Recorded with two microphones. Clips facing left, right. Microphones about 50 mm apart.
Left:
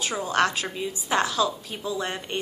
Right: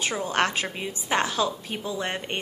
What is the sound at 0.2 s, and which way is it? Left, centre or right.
A woman's voice, right.